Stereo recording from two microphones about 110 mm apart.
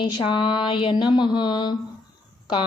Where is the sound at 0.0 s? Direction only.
45° left (ahead or behind).